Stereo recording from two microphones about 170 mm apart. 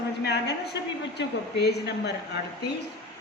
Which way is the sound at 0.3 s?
75° left (ahead or behind).